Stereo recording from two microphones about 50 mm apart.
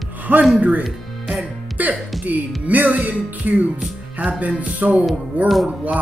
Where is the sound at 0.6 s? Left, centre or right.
Right.